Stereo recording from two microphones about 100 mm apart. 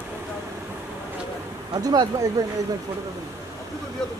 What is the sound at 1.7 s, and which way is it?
Speech, 40° right (ahead or behind).